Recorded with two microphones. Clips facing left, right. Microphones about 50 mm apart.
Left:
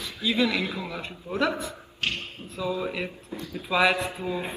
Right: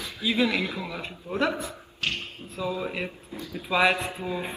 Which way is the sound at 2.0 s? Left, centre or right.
Left.